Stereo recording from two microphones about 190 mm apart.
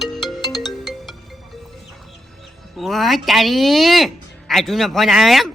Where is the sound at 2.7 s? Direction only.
Centre (ahead or behind).